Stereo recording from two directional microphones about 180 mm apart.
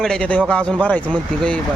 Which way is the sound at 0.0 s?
5° left (ahead or behind).